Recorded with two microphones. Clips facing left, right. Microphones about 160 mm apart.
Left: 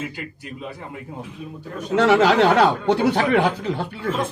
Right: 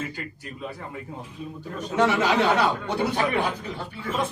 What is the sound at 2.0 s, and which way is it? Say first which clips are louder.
Speech: left 6 dB; 90° left.